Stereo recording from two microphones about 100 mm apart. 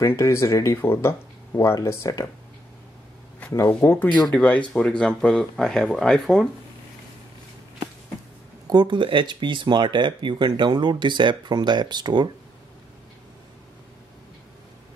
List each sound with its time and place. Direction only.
0.0 s speech: 30° left (ahead or behind)
3.5 s speech: 25° left (ahead or behind)
4.3 s speech: 15° left (ahead or behind)
8.6 s speech: 50° right (ahead or behind)